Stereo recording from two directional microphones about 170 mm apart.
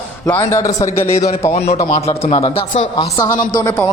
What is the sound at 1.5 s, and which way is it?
Speech, 40° left (ahead or behind).